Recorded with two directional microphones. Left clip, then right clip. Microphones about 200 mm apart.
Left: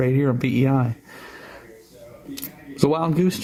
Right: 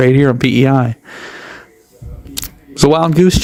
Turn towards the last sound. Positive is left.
turn(degrees=-35)  # may be behind; listen again after turning